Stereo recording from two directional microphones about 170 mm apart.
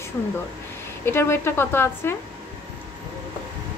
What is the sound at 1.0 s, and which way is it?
Speech, 15° left (ahead or behind).